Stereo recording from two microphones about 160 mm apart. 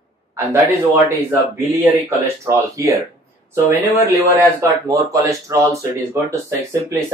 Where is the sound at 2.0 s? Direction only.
20° right (ahead or behind).